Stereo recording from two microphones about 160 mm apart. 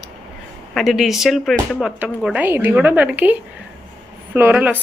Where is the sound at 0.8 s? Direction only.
Centre (ahead or behind).